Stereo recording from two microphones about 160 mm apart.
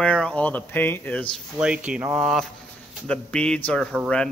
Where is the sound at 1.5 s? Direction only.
5° right (ahead or behind).